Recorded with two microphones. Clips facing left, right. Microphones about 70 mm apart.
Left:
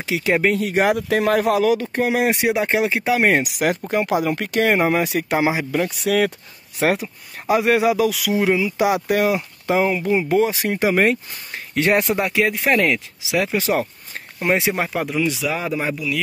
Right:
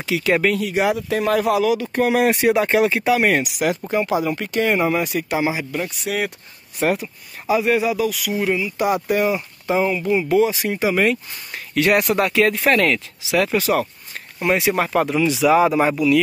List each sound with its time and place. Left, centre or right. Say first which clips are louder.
0.0 s speech: even; left
0.6 s speech: left 1 dB; left
0.9 s speech: left 1 dB; left
1.9 s speech: right 2 dB; left
3.9 s speech: even; left
6.8 s speech: left 1 dB; left
10.1 s speech: right 2 dB; left
11.7 s speech: right 1 dB; left
12.2 s speech: right 2 dB; centre
15.0 s speech: right 4 dB; centre